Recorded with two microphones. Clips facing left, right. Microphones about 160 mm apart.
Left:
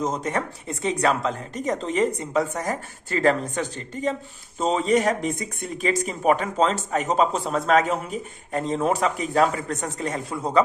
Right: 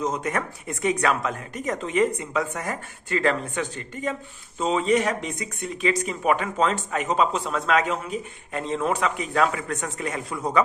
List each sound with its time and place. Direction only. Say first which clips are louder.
0.0 s speech: left 1 dB; 30° left (ahead or behind)